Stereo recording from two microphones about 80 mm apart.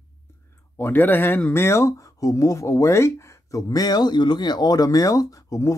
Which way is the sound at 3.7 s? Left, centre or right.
Left.